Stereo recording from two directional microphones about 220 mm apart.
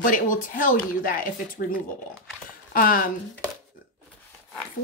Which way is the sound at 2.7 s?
40° left (ahead or behind).